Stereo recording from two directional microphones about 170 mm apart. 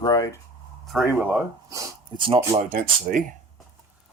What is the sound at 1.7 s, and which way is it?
Speech, 30° right (ahead or behind).